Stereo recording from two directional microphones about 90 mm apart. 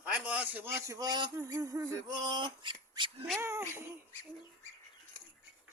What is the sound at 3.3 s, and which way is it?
Speech, 30° right (ahead or behind).